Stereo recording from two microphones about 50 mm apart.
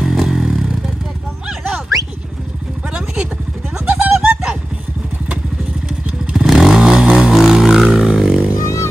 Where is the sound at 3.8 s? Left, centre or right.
Right.